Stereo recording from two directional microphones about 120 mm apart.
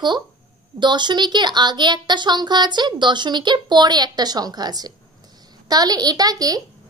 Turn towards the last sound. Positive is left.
turn(degrees=-30)  # may be behind; listen again after turning